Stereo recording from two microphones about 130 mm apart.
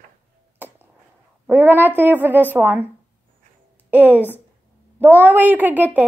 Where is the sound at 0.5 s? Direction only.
15° right (ahead or behind).